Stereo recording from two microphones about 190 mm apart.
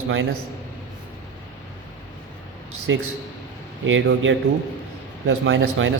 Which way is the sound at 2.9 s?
90° right.